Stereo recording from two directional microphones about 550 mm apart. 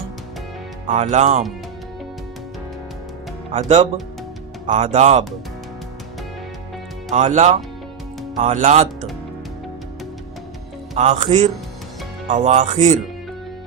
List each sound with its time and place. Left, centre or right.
0.9 s speech: centre
3.5 s speech: centre
7.1 s speech: centre
10.9 s speech: centre